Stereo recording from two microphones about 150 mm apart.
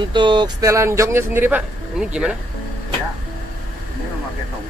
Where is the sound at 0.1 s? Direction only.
30° right (ahead or behind); by 1.6 s 15° right (ahead or behind).